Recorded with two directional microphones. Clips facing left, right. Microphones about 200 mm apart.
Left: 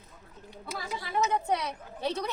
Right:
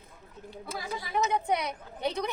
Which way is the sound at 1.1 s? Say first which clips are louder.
Even; 15° right (ahead or behind).